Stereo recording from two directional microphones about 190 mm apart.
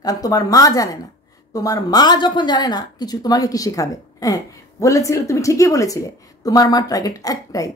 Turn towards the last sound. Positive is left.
turn(degrees=20)  # may be behind; listen again after turning